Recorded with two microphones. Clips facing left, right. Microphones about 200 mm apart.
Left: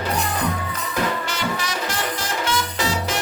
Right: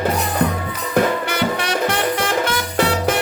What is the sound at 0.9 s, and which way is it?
Music, 60° right (ahead or behind).